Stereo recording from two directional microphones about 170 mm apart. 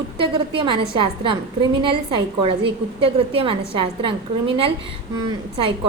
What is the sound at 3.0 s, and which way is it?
A woman's voice, 35° right (ahead or behind).